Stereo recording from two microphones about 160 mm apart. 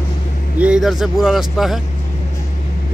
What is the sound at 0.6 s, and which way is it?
Speech, 5° right (ahead or behind).